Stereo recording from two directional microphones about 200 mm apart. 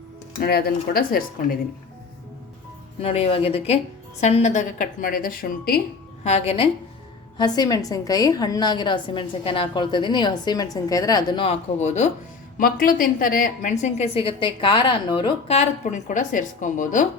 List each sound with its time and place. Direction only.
0.4 s speech: 50° left (ahead or behind)
3.0 s a woman's voice: 30° left (ahead or behind); by 5.8 s 50° left (ahead or behind)
6.2 s a woman's voice: 30° left (ahead or behind)
7.3 s a woman's voice: 20° left (ahead or behind); by 17.1 s 40° left (ahead or behind)